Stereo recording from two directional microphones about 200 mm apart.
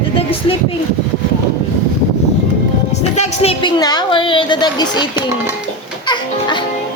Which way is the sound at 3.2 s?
30° left (ahead or behind).